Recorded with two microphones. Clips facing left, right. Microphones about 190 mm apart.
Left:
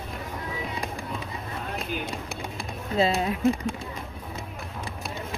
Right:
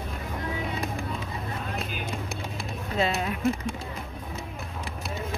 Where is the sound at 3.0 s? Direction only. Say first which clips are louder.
Left 3 dB; 30° left (ahead or behind).